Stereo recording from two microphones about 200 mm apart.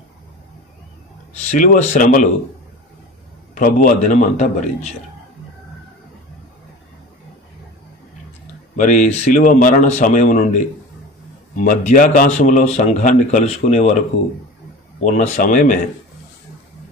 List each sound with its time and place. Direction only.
1.4 s a man's voice: 35° left (ahead or behind)
3.5 s a man's voice: 40° left (ahead or behind)
8.7 s a man's voice: 40° left (ahead or behind)
11.5 s a man's voice: 40° left (ahead or behind)
15.0 s a man's voice: 35° left (ahead or behind)